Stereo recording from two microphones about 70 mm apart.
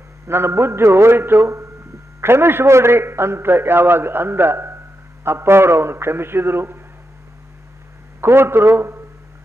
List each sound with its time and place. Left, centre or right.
0.3 s a man's voice: right
8.2 s a man's voice: right